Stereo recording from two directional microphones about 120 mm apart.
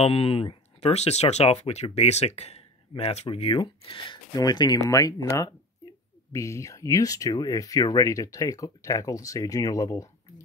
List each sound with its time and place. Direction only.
0.0 s speech: 55° left (ahead or behind); by 10.3 s 25° left (ahead or behind)